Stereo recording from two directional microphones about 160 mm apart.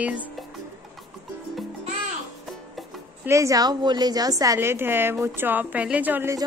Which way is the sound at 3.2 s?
20° right (ahead or behind).